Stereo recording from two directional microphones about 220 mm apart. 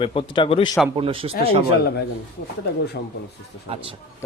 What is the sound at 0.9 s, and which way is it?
Speech, 25° right (ahead or behind).